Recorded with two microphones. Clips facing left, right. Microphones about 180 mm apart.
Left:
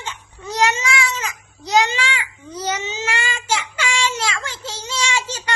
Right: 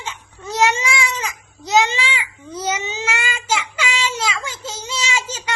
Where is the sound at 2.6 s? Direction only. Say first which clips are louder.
Right 1 dB; 10° right (ahead or behind).